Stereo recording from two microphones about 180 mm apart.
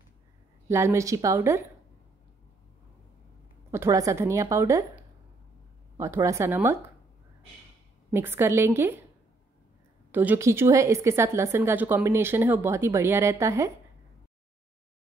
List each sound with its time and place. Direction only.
0.7 s a woman's voice: 15° right (ahead or behind)
3.7 s a woman's voice: 15° right (ahead or behind)
8.1 s a woman's voice: 15° right (ahead or behind)
10.1 s a woman's voice: 10° right (ahead or behind)